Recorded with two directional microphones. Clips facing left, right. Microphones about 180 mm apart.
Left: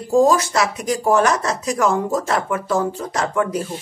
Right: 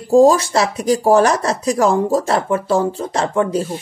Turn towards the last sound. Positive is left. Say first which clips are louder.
# right 3 dB
turn(degrees=-30)  # may be behind; listen again after turning